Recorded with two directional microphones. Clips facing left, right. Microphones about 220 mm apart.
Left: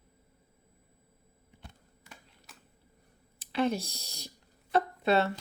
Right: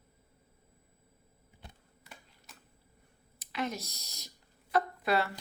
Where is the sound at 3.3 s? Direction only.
30° left (ahead or behind).